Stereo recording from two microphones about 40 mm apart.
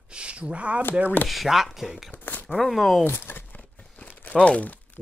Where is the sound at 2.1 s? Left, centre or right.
Left.